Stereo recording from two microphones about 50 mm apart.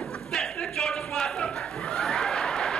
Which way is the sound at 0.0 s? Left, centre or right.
Centre.